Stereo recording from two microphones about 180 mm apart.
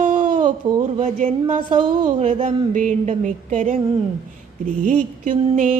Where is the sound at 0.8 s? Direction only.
40° right (ahead or behind).